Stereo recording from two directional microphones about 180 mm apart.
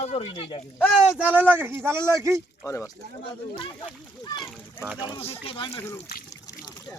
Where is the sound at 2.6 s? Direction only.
15° left (ahead or behind).